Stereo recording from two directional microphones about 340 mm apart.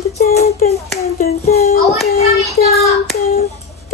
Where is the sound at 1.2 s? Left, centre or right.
Left.